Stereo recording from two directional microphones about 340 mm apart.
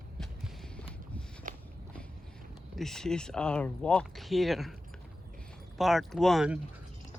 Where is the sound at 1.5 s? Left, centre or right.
Right.